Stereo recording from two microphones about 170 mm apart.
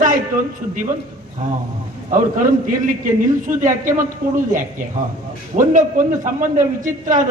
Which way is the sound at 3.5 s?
50° right (ahead or behind).